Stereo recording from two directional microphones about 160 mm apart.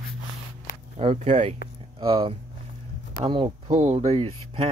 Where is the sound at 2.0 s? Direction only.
30° right (ahead or behind).